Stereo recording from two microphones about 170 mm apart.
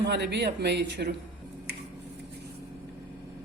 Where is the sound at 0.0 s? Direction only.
80° right.